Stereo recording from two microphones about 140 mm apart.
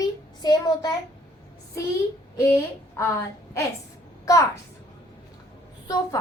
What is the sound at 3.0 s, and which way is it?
A woman's voice, 20° left (ahead or behind).